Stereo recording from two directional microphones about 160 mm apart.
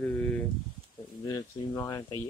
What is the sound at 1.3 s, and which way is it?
Speech, 25° left (ahead or behind).